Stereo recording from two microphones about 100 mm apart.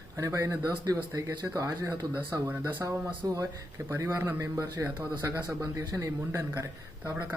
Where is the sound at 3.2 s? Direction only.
30° right (ahead or behind).